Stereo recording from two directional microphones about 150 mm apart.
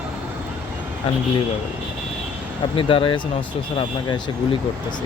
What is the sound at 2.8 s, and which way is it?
Speech, 35° left (ahead or behind).